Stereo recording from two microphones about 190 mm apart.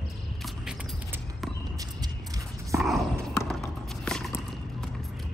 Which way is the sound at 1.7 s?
20° right (ahead or behind).